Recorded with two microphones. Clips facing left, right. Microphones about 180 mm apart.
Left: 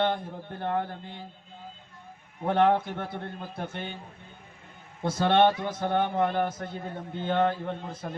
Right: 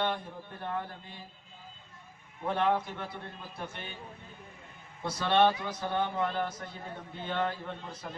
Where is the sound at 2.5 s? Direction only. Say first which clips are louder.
Left 6 dB; 55° left (ahead or behind).